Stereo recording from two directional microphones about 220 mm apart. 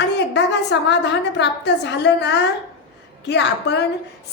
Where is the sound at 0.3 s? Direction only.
50° left (ahead or behind).